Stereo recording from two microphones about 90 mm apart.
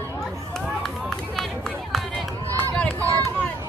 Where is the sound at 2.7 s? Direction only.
15° left (ahead or behind).